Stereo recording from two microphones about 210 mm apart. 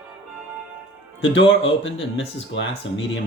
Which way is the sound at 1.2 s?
60° left (ahead or behind).